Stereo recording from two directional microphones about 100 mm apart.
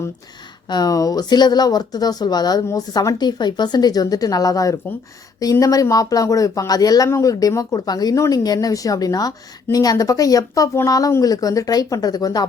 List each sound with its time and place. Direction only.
0.7 s speech: 40° left (ahead or behind)